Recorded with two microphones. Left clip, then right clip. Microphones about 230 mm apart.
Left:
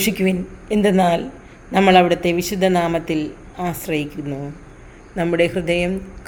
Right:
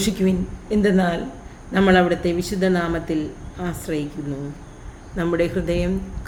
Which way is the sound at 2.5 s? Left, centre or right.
Centre.